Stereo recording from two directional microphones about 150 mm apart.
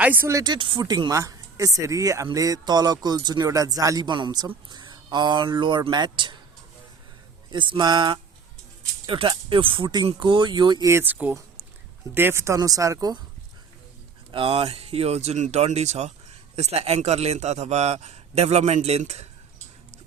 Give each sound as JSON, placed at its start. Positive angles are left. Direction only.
{"t": 0.0, "sound": "speech", "side_deg": -15}
{"t": 7.5, "sound": "speech", "side_deg": -30}
{"t": 10.9, "sound": "speech", "side_deg": -10}
{"t": 14.3, "sound": "a man's voice", "side_deg": -35}